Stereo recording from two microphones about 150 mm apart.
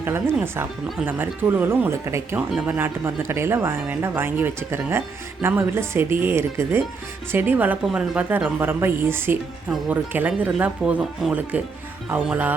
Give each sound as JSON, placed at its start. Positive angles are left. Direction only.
{"t": 0.0, "sound": "speech", "side_deg": -15}